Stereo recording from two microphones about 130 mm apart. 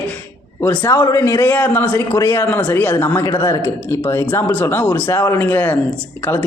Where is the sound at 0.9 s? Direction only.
30° left (ahead or behind).